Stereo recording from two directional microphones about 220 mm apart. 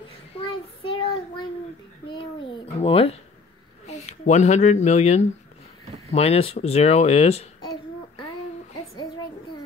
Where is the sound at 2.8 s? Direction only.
25° left (ahead or behind).